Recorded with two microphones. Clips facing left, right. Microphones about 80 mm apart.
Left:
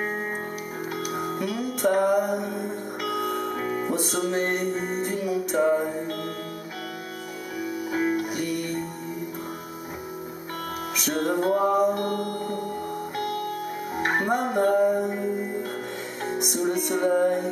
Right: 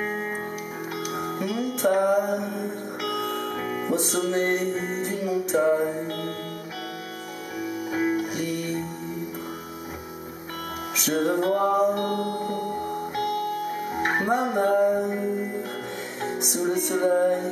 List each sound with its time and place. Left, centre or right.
1.1 s music: centre
7.6 s music: centre
11.0 s music: centre
12.4 s music: right
13.9 s music: centre